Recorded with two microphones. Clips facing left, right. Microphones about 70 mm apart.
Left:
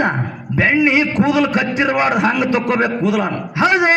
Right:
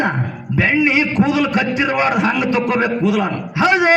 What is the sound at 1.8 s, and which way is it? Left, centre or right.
Speech, left.